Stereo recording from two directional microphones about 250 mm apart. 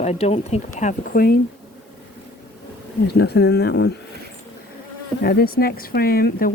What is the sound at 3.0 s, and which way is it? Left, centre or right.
Speech, left.